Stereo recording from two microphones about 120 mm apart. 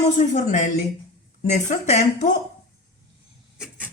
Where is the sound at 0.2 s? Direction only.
90° left.